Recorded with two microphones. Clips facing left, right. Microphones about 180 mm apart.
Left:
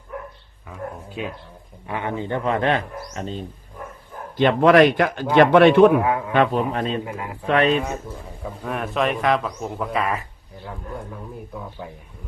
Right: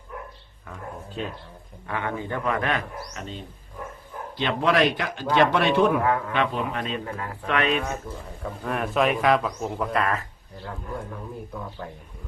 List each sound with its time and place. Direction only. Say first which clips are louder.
0.7 s a sound: left 4 dB; 10° left (ahead or behind)
1.9 s speech: left 3 dB; 20° left (ahead or behind)
4.4 s a man's voice: left 8 dB; 50° left (ahead or behind)
6.0 s speech: left 2 dB; 15° left (ahead or behind)
6.3 s a man's voice: left 6 dB; 45° left (ahead or behind)
7.0 s speech: left 2 dB; 15° left (ahead or behind)
7.4 s a man's voice: left 6 dB; 35° left (ahead or behind)
8.4 s speech: even; centre (ahead or behind)